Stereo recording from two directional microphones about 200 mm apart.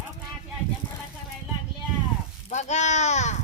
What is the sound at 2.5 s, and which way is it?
Speech, 35° left (ahead or behind).